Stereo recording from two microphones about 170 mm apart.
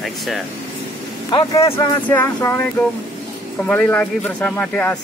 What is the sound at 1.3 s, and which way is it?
Speech, 20° left (ahead or behind).